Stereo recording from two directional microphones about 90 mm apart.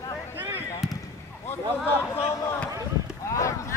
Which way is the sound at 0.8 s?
5° right (ahead or behind).